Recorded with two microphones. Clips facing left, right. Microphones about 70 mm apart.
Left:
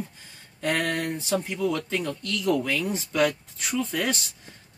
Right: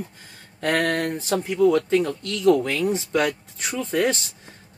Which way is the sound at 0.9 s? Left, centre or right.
Right.